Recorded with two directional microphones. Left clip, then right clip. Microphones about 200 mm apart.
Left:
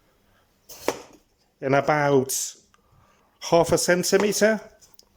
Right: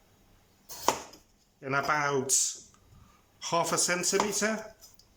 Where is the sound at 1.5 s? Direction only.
40° left (ahead or behind).